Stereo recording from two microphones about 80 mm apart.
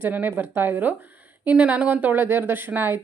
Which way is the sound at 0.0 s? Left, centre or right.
Right.